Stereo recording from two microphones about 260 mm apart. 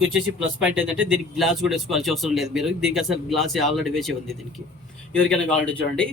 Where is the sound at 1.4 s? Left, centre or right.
Centre.